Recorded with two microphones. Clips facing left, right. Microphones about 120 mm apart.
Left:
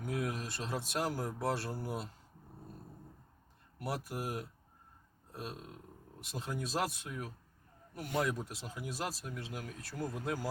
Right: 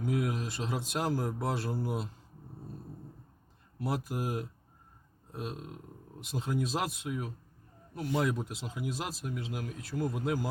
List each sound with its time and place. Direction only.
0.0 s speech: 20° right (ahead or behind)
3.8 s speech: 20° right (ahead or behind)